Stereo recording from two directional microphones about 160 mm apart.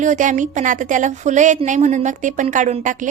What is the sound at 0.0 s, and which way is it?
A woman's voice, 50° right (ahead or behind).